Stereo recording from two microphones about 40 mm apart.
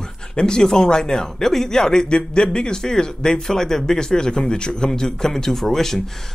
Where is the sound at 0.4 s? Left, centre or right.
Centre.